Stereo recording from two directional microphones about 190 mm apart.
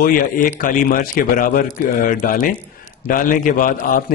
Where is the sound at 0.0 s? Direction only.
45° left (ahead or behind).